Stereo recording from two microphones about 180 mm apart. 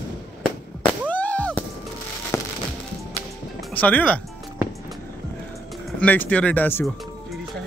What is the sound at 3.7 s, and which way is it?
Speech, 10° left (ahead or behind).